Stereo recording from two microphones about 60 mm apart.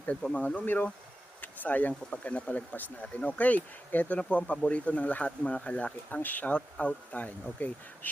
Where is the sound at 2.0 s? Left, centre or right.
Left.